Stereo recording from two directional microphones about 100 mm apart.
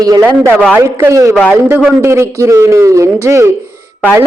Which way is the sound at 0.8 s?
25° right (ahead or behind).